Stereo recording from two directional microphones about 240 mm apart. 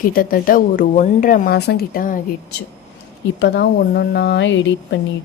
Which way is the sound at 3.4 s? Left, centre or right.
Left.